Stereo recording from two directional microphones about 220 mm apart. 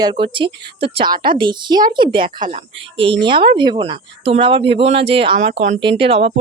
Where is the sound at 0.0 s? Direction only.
25° right (ahead or behind).